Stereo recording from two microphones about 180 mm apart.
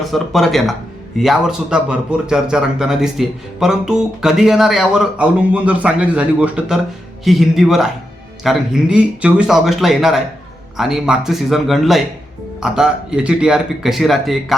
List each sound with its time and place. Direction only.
0.0 s speech: centre (ahead or behind)